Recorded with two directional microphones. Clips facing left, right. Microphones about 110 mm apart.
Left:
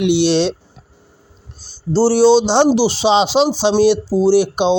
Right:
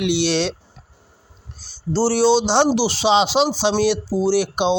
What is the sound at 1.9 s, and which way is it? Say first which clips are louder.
Speech: left 5 dB; 20° left (ahead or behind).